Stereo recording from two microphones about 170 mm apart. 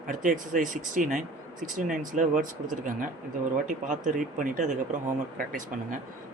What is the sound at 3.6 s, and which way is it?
Speech, 50° right (ahead or behind).